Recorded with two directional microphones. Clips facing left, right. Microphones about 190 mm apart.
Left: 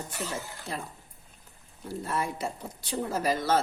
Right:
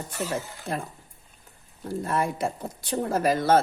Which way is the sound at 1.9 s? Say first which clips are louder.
Right 5 dB; 55° right (ahead or behind).